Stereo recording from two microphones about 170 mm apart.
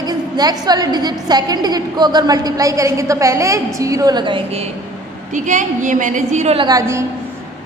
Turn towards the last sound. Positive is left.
turn(degrees=-20)  # may be behind; listen again after turning